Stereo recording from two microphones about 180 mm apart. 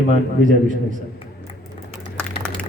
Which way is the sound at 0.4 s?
45° right (ahead or behind).